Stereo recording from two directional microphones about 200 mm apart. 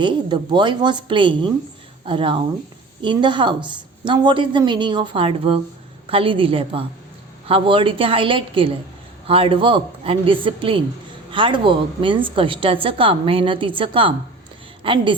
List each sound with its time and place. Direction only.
0.0 s a woman's voice: 25° right (ahead or behind)